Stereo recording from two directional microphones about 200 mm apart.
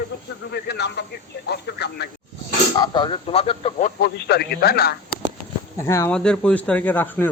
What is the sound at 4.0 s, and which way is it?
Speech, 55° left (ahead or behind).